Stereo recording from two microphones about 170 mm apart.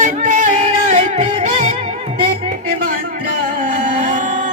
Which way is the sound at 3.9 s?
45° right (ahead or behind).